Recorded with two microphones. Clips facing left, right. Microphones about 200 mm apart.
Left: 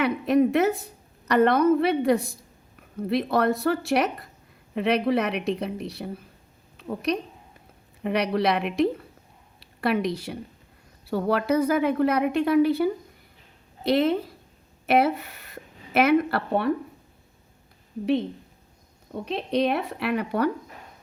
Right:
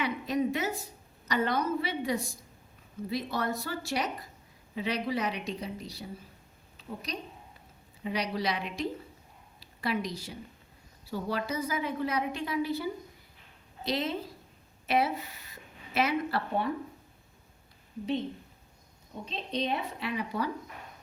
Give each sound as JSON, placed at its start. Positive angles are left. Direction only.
{"t": 0.0, "sound": "a woman's voice", "side_deg": 60}
{"t": 19.1, "sound": "a woman's voice", "side_deg": 65}